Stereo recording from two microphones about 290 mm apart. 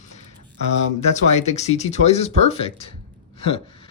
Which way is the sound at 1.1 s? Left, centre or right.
Left.